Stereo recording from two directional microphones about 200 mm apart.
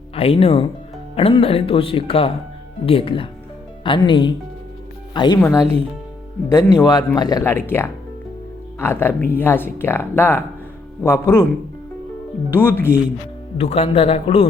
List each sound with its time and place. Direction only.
0.2 s speech: 30° left (ahead or behind); by 11.4 s 15° left (ahead or behind)
12.5 s speech: 10° left (ahead or behind)
13.6 s speech: 30° left (ahead or behind)